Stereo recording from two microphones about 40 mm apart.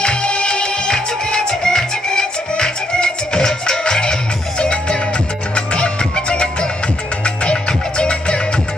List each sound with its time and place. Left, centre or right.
0.0 s music: left
8.0 s music: left